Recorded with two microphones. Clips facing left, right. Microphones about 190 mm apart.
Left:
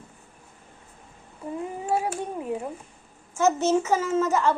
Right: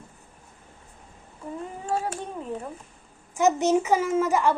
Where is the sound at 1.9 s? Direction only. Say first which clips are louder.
Left 2 dB; 10° left (ahead or behind).